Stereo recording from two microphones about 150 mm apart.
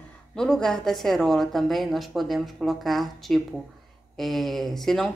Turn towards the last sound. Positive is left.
turn(degrees=0)  # may be behind; listen again after turning